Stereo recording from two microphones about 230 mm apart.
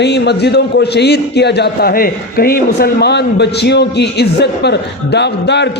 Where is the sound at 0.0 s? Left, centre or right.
Left.